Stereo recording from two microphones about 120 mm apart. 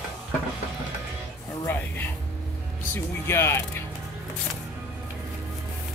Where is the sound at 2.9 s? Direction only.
20° left (ahead or behind).